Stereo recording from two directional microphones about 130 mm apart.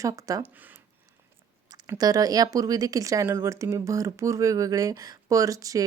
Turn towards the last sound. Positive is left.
turn(degrees=-25)  # may be behind; listen again after turning